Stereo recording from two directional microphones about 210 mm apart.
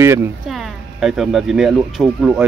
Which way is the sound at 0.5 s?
Centre (ahead or behind).